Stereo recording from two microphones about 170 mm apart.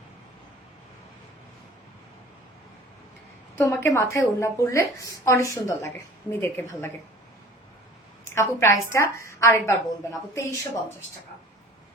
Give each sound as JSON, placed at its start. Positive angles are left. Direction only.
{"t": 3.6, "sound": "a woman's voice", "side_deg": 15}
{"t": 8.3, "sound": "a woman's voice", "side_deg": 15}